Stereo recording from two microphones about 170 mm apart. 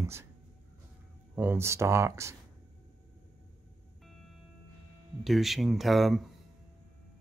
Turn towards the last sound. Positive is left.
turn(degrees=0)  # may be behind; listen again after turning